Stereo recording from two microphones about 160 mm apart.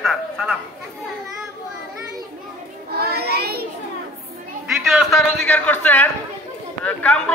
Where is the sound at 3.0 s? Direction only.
80° right.